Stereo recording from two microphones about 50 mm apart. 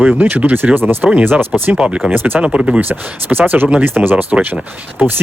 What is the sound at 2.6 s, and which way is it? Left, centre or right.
Speech, centre.